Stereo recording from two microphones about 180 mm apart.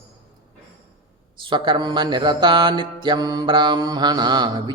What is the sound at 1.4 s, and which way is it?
Mantra, 25° right (ahead or behind).